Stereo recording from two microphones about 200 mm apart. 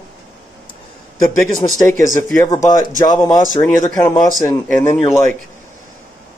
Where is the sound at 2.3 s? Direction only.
15° left (ahead or behind).